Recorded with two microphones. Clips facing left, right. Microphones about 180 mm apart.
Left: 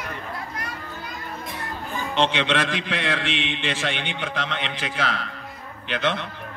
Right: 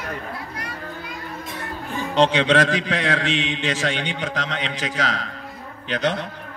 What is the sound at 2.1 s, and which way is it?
A man's voice, 40° right (ahead or behind).